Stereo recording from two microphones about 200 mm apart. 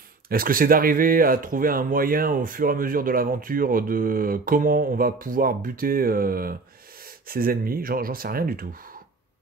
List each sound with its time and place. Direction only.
0.3 s speech: 45° right (ahead or behind)